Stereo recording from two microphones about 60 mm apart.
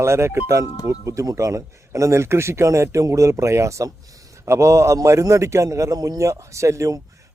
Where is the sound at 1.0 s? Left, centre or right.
Right.